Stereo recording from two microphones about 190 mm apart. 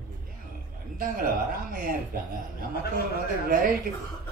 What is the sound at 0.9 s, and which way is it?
Speech, 45° right (ahead or behind).